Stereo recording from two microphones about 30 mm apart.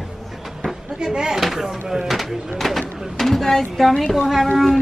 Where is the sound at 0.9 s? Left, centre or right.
Right.